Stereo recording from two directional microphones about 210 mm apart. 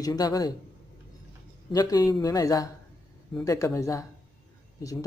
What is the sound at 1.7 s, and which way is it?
Speech, 15° left (ahead or behind).